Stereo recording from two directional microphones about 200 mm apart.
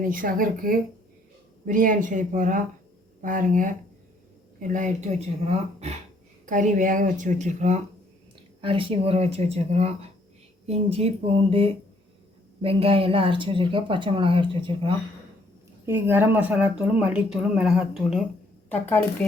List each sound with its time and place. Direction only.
0.0 s a woman's voice: 45° right (ahead or behind); by 14.9 s 25° right (ahead or behind)
15.9 s speech: 10° right (ahead or behind)